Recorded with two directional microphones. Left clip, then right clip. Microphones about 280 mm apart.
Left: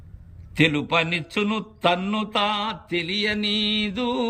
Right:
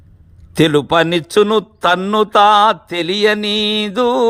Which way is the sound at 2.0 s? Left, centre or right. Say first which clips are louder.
Right 12 dB; right.